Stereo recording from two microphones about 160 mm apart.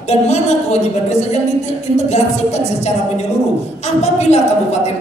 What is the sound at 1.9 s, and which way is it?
Speech, 45° left (ahead or behind).